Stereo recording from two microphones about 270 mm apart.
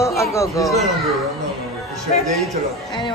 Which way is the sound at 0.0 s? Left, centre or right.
Centre.